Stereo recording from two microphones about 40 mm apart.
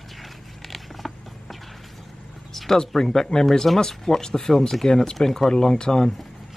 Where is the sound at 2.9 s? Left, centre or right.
Centre.